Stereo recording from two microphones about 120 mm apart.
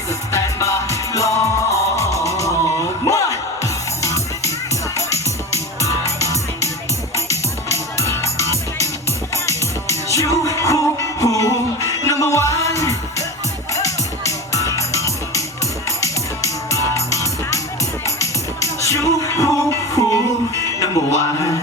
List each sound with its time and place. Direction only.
0.3 s music: 25° left (ahead or behind)